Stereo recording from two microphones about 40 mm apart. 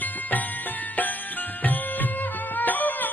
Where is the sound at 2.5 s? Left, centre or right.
Left.